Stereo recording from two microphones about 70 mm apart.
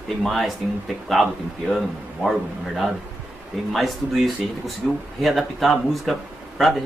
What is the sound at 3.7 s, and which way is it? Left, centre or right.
Speech, centre.